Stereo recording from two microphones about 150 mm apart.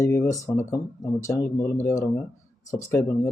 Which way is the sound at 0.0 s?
20° left (ahead or behind).